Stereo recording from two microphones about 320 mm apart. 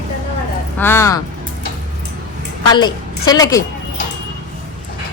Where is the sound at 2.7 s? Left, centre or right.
Centre.